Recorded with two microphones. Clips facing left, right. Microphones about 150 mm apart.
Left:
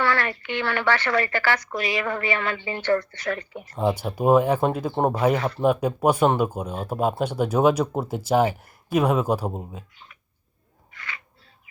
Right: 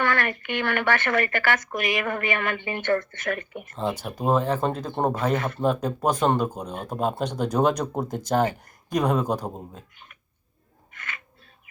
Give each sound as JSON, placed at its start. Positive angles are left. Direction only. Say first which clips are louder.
{"t": 0.0, "sound": "speech", "louder": "left 1 dB", "side_deg": -50}
{"t": 3.6, "sound": "speech", "louder": "left 4 dB", "side_deg": 15}
{"t": 10.9, "sound": "owl", "louder": "left 1 dB", "side_deg": -50}